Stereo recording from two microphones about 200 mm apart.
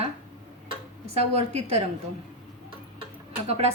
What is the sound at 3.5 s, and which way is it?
Speech, 30° right (ahead or behind).